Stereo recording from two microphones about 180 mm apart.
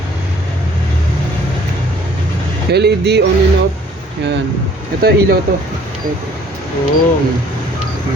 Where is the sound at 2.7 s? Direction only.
65° right (ahead or behind).